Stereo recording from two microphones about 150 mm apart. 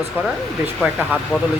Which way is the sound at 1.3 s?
10° right (ahead or behind).